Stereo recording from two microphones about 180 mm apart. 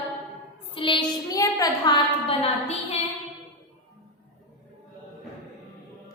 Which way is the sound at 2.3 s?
35° left (ahead or behind).